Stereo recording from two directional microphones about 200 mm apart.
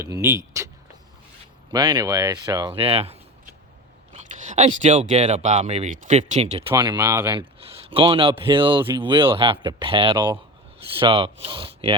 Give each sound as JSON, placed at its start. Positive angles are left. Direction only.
{"t": 0.0, "sound": "speech", "side_deg": -15}
{"t": 0.6, "sound": "a sound", "side_deg": -15}
{"t": 1.7, "sound": "speech", "side_deg": -20}
{"t": 6.7, "sound": "speech", "side_deg": -20}
{"t": 7.6, "sound": "speech", "side_deg": -25}